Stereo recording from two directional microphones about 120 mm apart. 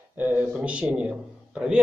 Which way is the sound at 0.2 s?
15° right (ahead or behind).